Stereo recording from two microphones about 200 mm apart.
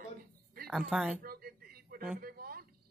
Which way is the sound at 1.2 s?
50° right (ahead or behind).